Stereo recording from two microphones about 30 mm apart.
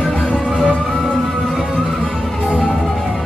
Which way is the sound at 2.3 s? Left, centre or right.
Left.